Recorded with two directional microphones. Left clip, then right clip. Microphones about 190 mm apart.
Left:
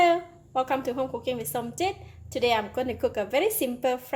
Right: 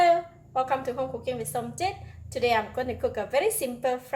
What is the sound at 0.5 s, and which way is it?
A woman's voice, 40° left (ahead or behind).